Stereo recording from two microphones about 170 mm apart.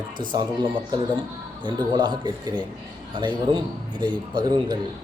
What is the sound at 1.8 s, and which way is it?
A man's voice, 25° right (ahead or behind).